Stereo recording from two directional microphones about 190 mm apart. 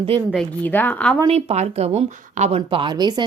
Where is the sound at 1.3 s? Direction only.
35° right (ahead or behind).